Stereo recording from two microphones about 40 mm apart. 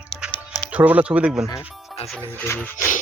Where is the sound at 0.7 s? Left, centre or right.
Right.